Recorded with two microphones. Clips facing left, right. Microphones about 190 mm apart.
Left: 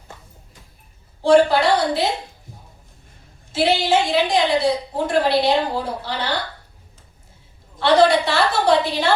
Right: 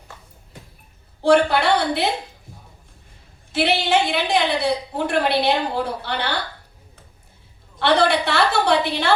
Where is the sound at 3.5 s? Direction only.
65° right (ahead or behind).